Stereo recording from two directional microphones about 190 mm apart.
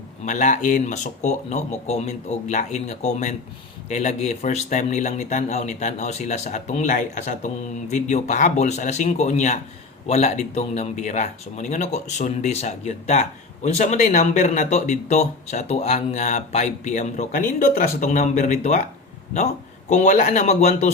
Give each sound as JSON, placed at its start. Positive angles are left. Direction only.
{"t": 0.3, "sound": "speech", "side_deg": 40}
{"t": 19.9, "sound": "speech", "side_deg": 40}